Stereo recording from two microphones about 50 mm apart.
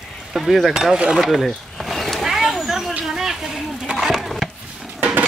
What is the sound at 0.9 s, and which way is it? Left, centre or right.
Mechanisms, right.